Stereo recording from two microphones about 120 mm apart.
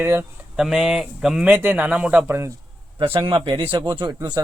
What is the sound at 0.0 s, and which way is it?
Speech, 20° right (ahead or behind).